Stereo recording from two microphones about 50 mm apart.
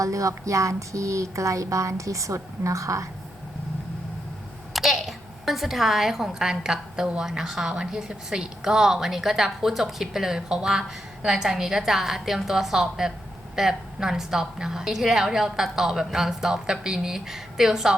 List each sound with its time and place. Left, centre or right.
0.0 s speech: right
4.7 s a child's voice: centre